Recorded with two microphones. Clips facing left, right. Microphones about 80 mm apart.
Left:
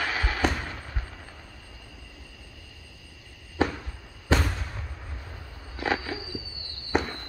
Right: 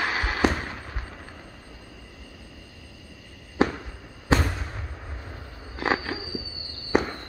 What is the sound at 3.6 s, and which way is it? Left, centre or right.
Fireworks, centre.